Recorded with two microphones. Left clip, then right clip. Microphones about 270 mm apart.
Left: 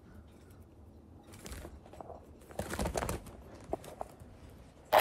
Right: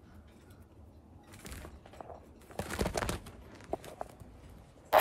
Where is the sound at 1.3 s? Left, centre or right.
Centre.